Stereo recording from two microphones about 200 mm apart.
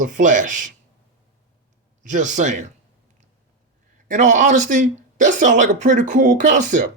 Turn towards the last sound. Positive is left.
turn(degrees=-40)  # may be behind; listen again after turning